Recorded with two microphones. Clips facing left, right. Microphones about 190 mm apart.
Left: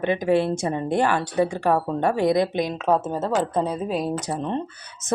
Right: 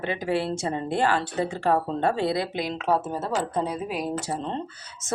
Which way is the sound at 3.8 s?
25° left (ahead or behind).